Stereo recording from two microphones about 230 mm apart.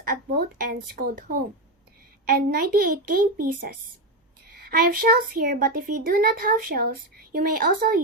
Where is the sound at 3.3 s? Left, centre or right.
Right.